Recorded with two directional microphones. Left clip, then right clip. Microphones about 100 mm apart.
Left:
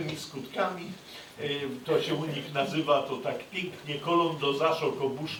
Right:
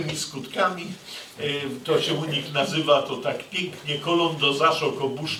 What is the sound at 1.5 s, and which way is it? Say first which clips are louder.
Speech: right 4 dB; 25° right (ahead or behind).